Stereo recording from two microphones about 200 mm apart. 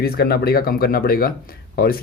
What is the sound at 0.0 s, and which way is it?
Speech, 50° left (ahead or behind).